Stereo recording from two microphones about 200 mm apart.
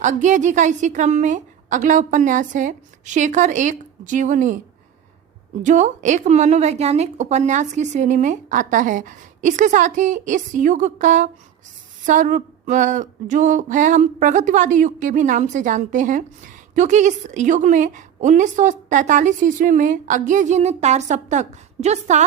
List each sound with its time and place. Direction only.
0.0 s a woman's voice: 35° right (ahead or behind)
5.6 s a woman's voice: 35° right (ahead or behind)